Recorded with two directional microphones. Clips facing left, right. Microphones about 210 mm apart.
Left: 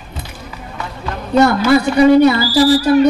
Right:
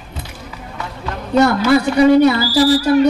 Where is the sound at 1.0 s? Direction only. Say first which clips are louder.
Left 1 dB; 20° left (ahead or behind).